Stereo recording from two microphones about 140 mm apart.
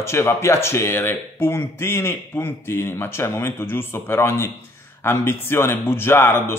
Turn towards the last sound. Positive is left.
turn(degrees=15)  # may be behind; listen again after turning